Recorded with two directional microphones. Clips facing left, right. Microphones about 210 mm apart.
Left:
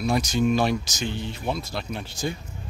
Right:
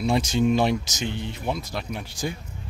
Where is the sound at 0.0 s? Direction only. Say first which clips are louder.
Right 1 dB; 25° right (ahead or behind).